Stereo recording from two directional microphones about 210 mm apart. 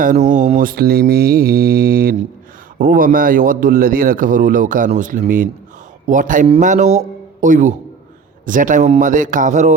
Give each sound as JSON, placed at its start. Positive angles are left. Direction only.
{"t": 0.0, "sound": "mantra", "side_deg": -40}
{"t": 2.7, "sound": "a man's voice", "side_deg": -40}